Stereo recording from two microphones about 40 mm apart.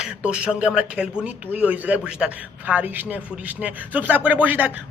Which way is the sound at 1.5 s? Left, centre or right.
Right.